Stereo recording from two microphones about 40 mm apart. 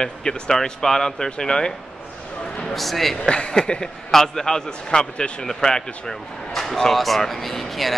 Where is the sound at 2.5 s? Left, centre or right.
Centre.